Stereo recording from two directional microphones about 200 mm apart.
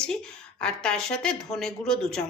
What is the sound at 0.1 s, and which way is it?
A woman's voice, 5° left (ahead or behind).